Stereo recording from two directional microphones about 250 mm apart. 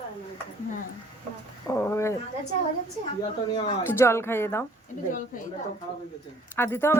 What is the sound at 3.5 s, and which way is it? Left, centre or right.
Speech, centre.